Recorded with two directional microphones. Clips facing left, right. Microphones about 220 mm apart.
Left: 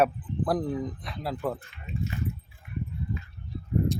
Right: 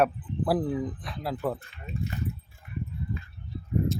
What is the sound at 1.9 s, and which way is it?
Speech, 40° right (ahead or behind).